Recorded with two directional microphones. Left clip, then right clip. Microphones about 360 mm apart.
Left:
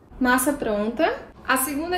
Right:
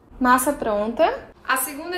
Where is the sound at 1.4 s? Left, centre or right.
Centre.